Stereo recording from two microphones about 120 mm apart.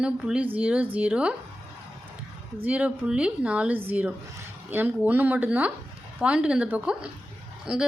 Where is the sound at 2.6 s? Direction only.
10° right (ahead or behind).